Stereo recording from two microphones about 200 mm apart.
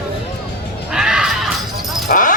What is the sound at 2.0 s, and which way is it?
Dog, 40° left (ahead or behind).